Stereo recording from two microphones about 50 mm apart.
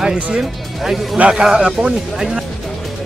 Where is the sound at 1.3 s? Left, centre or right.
Centre.